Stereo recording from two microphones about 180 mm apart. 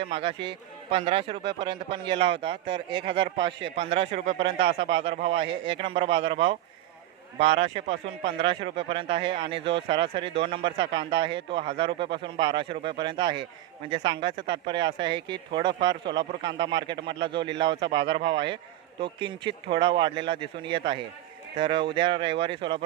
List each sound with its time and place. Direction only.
0.2 s a man's voice: 30° right (ahead or behind)